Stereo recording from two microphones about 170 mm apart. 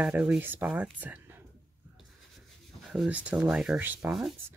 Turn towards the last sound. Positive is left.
turn(degrees=0)  # may be behind; listen again after turning